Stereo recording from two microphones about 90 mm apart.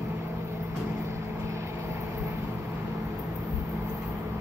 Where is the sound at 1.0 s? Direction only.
30° right (ahead or behind).